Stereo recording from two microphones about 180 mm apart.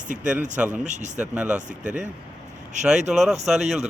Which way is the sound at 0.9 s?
40° right (ahead or behind).